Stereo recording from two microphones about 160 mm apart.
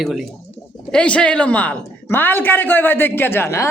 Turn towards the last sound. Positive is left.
turn(degrees=15)  # may be behind; listen again after turning